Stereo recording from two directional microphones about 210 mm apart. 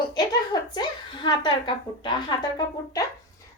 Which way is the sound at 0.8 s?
20° left (ahead or behind).